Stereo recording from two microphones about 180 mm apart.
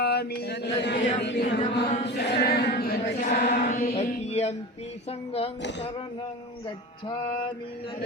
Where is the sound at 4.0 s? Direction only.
35° left (ahead or behind).